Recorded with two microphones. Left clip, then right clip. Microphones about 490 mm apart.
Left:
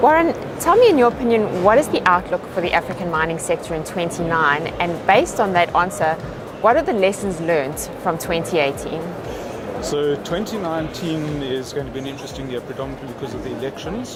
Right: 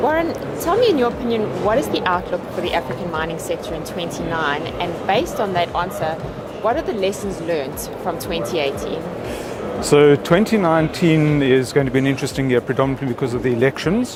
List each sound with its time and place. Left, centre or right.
0.0 s speech: left
9.9 s speech: right